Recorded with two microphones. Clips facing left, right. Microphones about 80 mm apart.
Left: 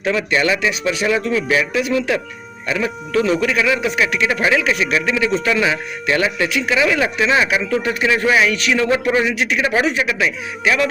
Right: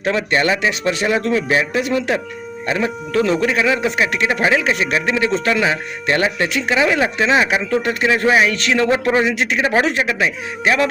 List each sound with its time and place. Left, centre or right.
0.0 s speech: right
8.9 s a man's voice: right